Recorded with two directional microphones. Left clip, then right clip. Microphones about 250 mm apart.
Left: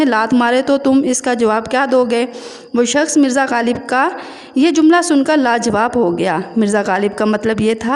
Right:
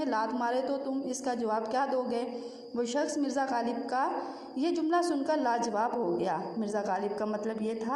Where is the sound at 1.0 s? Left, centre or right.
Left.